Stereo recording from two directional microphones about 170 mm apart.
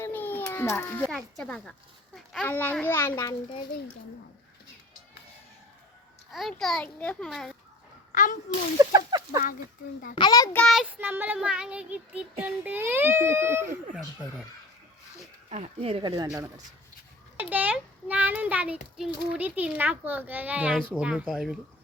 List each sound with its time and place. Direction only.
0.0 s a child's voice: 10° left (ahead or behind)
2.1 s a sound: centre (ahead or behind)
2.5 s a child's voice: 10° left (ahead or behind)
6.3 s a child's voice: centre (ahead or behind)
8.1 s a child's voice: 50° left (ahead or behind)
8.8 s speech: 20° right (ahead or behind)
10.2 s a child's voice: 25° left (ahead or behind)
10.5 s speech: 5° left (ahead or behind); by 13.7 s 15° right (ahead or behind)
15.4 s speech: 40° right (ahead or behind); by 21.6 s 5° right (ahead or behind)